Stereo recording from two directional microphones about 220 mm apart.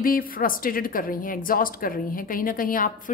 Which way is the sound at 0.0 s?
40° left (ahead or behind).